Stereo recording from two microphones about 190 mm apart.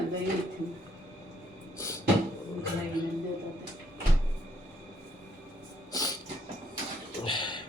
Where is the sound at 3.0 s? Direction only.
20° left (ahead or behind).